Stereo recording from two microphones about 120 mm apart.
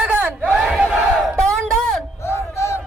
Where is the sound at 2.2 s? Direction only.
20° left (ahead or behind).